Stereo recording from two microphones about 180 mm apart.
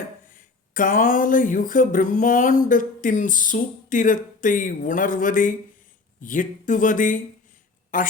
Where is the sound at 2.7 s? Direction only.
45° left (ahead or behind).